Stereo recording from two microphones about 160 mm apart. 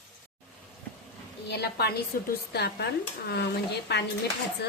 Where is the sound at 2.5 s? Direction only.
85° left.